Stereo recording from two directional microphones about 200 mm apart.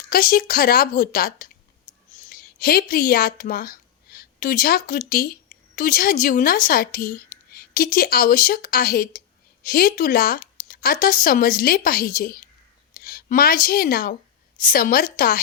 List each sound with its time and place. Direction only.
0.1 s a woman's voice: 45° left (ahead or behind)